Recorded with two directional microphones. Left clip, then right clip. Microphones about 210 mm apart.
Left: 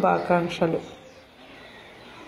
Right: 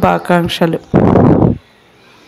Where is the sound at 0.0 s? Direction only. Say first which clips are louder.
Right 9 dB; 40° right (ahead or behind).